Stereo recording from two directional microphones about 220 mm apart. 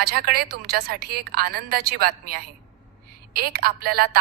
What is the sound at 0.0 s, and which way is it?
A woman's voice, 45° right (ahead or behind).